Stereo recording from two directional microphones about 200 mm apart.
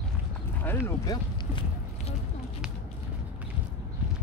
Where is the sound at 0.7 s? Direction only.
15° left (ahead or behind).